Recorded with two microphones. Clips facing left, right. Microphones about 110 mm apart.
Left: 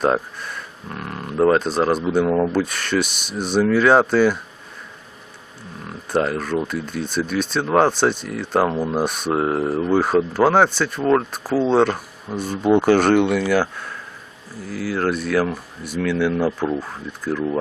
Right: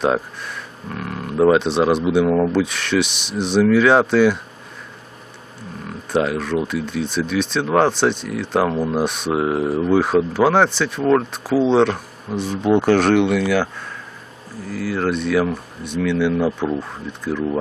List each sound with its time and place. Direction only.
0.0 s speech: centre (ahead or behind)
6.2 s speech: centre (ahead or behind)
14.7 s speech: 5° left (ahead or behind)